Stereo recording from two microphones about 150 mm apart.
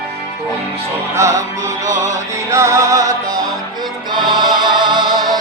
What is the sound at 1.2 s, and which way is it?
Music, 20° right (ahead or behind).